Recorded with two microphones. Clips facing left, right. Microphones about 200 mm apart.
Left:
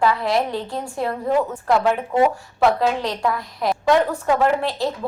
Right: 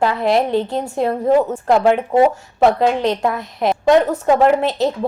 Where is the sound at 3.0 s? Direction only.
20° right (ahead or behind).